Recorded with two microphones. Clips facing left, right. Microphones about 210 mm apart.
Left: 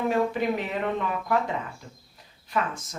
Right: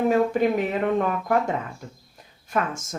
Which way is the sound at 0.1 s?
45° right (ahead or behind).